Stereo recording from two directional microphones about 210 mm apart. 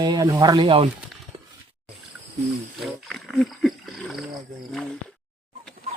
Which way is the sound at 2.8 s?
Centre (ahead or behind).